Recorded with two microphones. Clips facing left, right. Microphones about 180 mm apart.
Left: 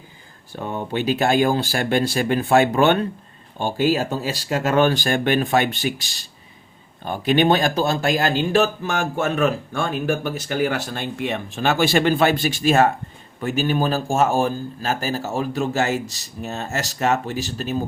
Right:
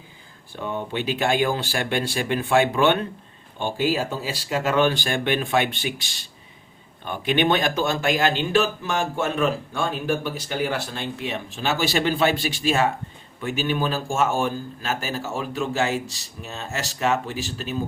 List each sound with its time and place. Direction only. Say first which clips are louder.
0.6 s a man's voice: left 3 dB; 45° left (ahead or behind)